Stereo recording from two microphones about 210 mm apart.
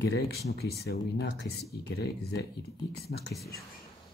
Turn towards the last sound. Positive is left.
turn(degrees=50)  # may be behind; listen again after turning